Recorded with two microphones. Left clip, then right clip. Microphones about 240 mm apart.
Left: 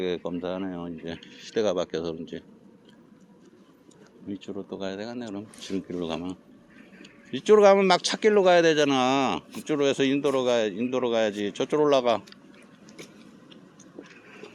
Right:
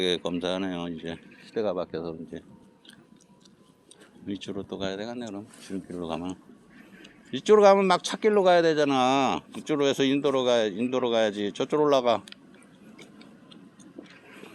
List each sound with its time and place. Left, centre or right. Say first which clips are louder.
0.0 s speech: right 2 dB; centre
1.5 s speech: left 3 dB; centre
4.3 s speech: right 1 dB; centre
5.6 s speech: left 5 dB; centre
6.1 s speech: even; centre